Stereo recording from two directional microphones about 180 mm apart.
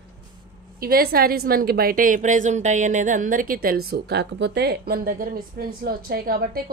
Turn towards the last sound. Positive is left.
turn(degrees=-55)  # may be behind; listen again after turning